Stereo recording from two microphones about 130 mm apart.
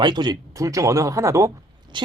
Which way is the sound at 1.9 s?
35° right (ahead or behind).